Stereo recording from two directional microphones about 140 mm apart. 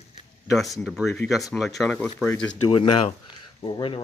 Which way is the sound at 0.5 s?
Centre (ahead or behind).